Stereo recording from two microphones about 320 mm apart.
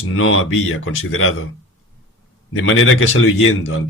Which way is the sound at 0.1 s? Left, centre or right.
Left.